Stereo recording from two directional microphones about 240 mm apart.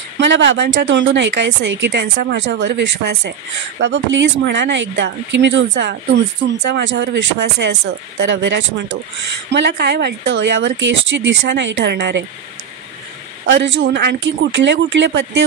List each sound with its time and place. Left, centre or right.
0.2 s speech: right
13.5 s speech: right